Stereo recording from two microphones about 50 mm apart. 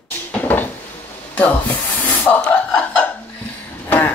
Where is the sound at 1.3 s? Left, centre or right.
Left.